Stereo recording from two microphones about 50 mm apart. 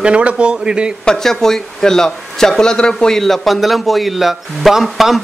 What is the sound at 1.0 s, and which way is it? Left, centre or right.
Speech, centre.